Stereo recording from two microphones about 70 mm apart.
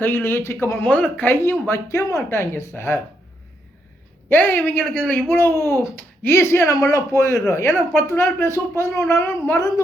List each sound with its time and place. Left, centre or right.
0.0 s speech: left
0.8 s a woman's voice: left
1.3 s speech: left
4.3 s a woman's voice: left
5.3 s speech: left